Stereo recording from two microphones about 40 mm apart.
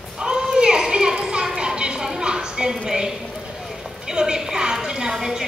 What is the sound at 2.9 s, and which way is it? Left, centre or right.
A woman's voice, centre.